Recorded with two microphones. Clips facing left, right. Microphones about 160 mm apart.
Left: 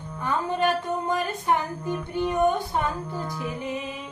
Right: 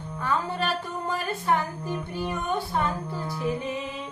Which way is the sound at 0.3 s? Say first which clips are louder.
Left 3 dB; 20° left (ahead or behind).